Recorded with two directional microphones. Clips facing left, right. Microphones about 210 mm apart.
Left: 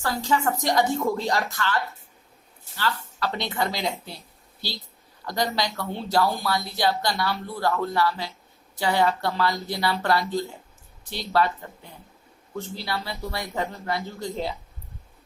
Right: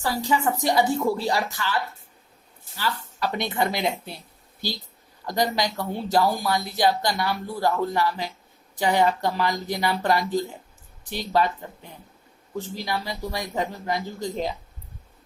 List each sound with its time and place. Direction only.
0.0 s a woman's voice: 15° right (ahead or behind)
5.2 s speech: 20° right (ahead or behind)